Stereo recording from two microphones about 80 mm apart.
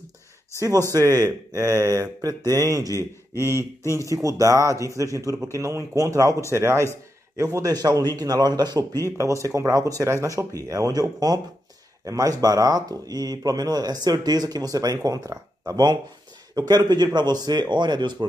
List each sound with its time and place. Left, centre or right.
0.6 s speech: right
3.8 s speech: left
4.1 s speech: right
6.5 s speech: right
9.2 s speech: right